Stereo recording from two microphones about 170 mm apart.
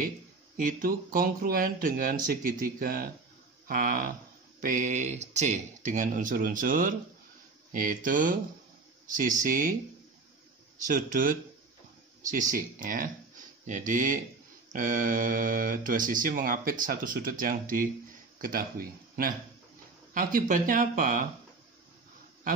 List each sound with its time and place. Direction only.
0.6 s speech: 55° right (ahead or behind)
10.9 s speech: 50° right (ahead or behind)